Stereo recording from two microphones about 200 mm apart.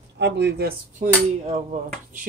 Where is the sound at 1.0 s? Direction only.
40° right (ahead or behind).